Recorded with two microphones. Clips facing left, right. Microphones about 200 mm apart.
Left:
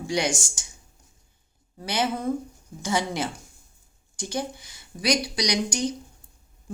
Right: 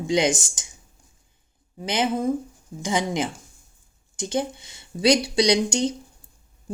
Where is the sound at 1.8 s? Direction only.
20° right (ahead or behind).